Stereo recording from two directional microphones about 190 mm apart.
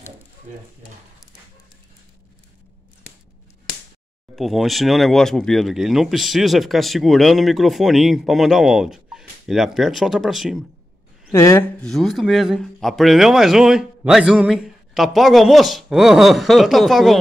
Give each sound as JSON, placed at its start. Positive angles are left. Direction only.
{"t": 4.4, "sound": "speech", "side_deg": 0}
{"t": 11.3, "sound": "speech", "side_deg": 15}
{"t": 11.8, "sound": "speech", "side_deg": 0}